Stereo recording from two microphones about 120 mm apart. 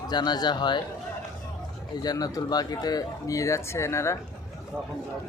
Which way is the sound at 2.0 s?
30° left (ahead or behind).